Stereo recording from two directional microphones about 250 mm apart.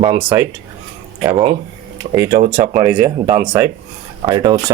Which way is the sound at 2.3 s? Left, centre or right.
Right.